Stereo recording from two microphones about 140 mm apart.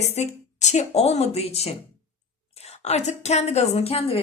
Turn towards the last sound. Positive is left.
turn(degrees=45)  # may be behind; listen again after turning